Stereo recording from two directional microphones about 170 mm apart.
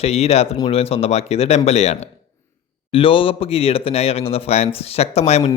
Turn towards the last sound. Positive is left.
turn(degrees=40)  # may be behind; listen again after turning